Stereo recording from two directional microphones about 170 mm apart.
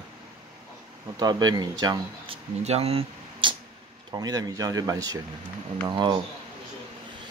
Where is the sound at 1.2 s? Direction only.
25° right (ahead or behind).